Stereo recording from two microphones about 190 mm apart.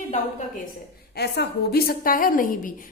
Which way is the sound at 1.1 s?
60° left (ahead or behind).